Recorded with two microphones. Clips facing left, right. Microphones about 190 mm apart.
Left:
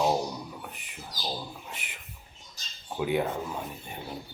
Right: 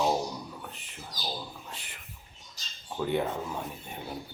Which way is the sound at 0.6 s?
15° left (ahead or behind).